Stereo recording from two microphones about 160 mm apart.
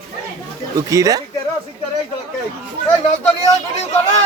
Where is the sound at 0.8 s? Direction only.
20° right (ahead or behind).